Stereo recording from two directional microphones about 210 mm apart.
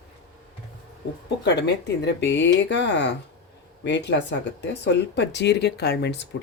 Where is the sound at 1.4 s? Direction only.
55° left (ahead or behind).